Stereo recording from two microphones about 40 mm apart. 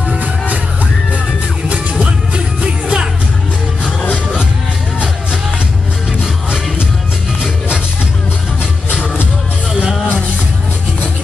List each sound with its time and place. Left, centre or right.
2.3 s music: centre
8.9 s music: right